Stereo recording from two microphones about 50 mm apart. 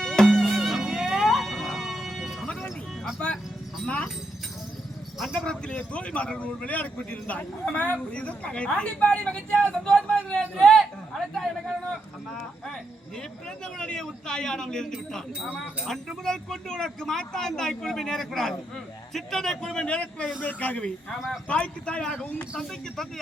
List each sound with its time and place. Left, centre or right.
0.0 s music: centre
0.6 s music: centre
1.3 s music: centre
3.8 s speech: centre
5.5 s speech: centre
13.7 s speech: centre
22.0 s speech: centre